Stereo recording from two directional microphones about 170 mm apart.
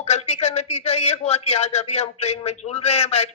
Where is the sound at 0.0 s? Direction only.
40° left (ahead or behind).